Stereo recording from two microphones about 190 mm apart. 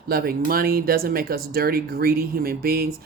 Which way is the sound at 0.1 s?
50° right (ahead or behind).